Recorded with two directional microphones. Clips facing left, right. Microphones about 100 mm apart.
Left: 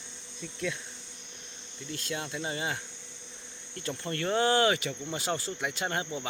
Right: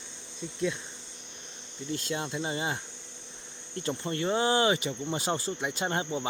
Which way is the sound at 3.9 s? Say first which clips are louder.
Right 1 dB; 20° right (ahead or behind).